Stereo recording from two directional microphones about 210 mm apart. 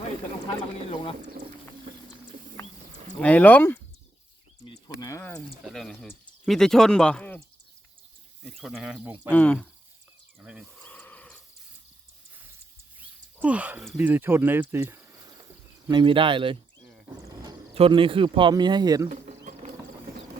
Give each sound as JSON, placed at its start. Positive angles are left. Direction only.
{"t": 0.4, "sound": "speech", "side_deg": 25}
{"t": 3.2, "sound": "speech", "side_deg": 5}
{"t": 5.6, "sound": "speech", "side_deg": 0}
{"t": 9.3, "sound": "speech", "side_deg": 5}
{"t": 10.4, "sound": "speech", "side_deg": -5}
{"t": 10.8, "sound": "a sound", "side_deg": 5}
{"t": 13.0, "sound": "speech", "side_deg": -5}
{"t": 17.2, "sound": "a sound", "side_deg": -15}
{"t": 17.7, "sound": "speech", "side_deg": -25}